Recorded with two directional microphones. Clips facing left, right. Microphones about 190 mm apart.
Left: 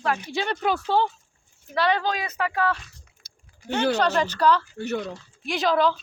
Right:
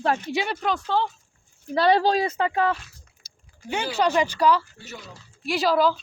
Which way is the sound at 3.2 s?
60° left (ahead or behind).